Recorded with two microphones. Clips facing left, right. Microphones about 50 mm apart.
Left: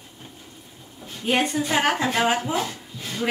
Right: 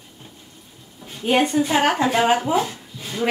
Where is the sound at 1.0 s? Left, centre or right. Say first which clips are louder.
Right 4 dB; centre.